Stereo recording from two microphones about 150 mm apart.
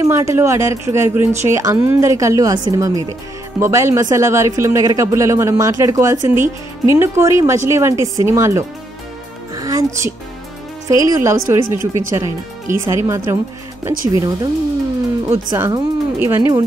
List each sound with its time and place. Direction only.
0.0 s speech: 20° right (ahead or behind)
9.6 s music: 25° right (ahead or behind)
10.9 s speech: 20° right (ahead or behind)
15.5 s speech: 20° right (ahead or behind)